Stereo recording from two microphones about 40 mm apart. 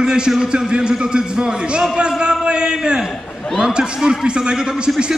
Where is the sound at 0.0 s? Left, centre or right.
Right.